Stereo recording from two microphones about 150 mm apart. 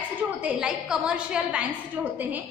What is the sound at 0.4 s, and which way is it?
A woman's voice, 5° right (ahead or behind).